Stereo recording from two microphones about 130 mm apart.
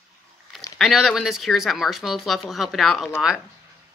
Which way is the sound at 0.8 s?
Centre (ahead or behind).